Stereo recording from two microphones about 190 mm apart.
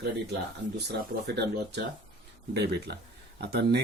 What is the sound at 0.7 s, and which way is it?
Speech, 60° right (ahead or behind).